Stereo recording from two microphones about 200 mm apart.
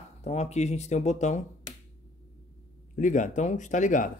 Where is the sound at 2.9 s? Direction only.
40° left (ahead or behind).